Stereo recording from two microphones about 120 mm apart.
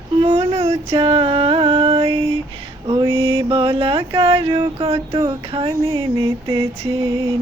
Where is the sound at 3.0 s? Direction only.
40° right (ahead or behind).